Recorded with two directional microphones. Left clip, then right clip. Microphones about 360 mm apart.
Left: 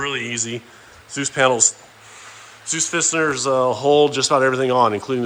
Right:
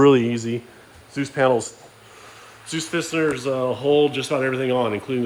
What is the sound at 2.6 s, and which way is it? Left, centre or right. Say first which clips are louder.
Speech: left 4 dB; centre.